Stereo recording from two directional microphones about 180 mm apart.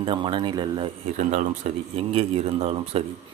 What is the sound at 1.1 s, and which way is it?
Speech, 40° right (ahead or behind).